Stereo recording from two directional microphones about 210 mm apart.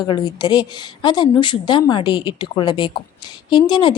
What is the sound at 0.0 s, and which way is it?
A woman's voice, 20° left (ahead or behind).